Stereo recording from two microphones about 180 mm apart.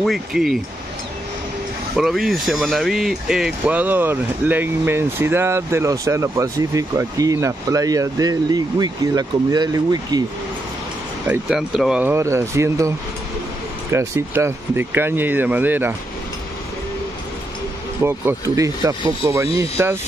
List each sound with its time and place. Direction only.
0.0 s speech: centre (ahead or behind)
2.0 s speech: centre (ahead or behind); by 10.2 s 20° right (ahead or behind)
11.2 s speech: 5° right (ahead or behind)
18.0 s speech: 15° right (ahead or behind)